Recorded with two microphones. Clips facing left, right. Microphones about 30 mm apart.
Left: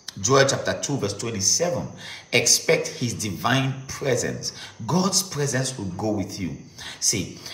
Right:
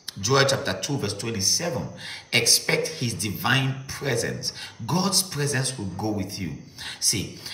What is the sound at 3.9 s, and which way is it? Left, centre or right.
A man's voice, right.